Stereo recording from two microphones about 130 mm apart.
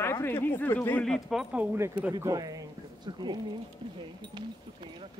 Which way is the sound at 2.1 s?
25° right (ahead or behind).